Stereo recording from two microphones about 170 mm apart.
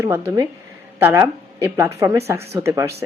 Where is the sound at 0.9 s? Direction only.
15° right (ahead or behind).